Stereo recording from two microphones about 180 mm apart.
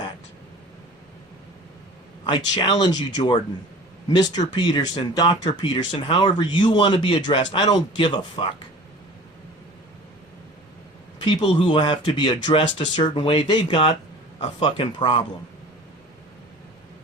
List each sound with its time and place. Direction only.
2.3 s speech: 25° left (ahead or behind)
11.2 s speech: 25° left (ahead or behind)